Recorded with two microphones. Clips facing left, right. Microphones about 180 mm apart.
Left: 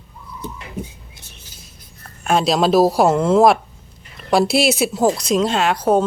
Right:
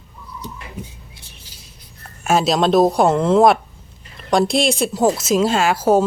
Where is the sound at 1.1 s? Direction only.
45° left (ahead or behind).